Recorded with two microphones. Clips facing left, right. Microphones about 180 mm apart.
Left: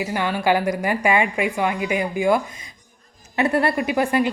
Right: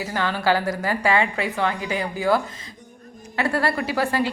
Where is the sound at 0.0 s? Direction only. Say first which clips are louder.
Left 2 dB; 15° left (ahead or behind).